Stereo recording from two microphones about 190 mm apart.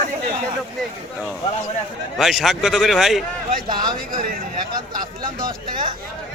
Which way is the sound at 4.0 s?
45° right (ahead or behind).